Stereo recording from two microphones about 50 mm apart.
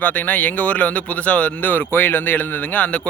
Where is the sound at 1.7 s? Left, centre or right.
Left.